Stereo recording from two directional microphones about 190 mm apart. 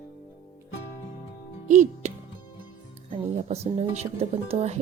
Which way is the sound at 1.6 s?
40° right (ahead or behind).